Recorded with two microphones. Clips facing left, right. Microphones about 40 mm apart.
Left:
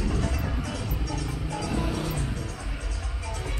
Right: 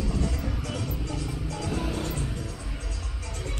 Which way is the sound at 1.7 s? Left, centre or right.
Centre.